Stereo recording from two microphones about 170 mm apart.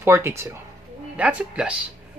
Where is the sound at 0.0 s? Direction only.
15° right (ahead or behind).